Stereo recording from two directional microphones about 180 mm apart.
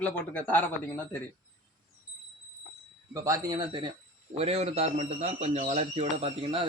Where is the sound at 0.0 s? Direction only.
10° left (ahead or behind).